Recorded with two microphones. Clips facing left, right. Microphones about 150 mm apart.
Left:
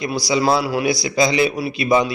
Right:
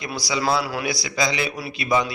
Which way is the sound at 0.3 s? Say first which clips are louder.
Left 5 dB; 35° left (ahead or behind).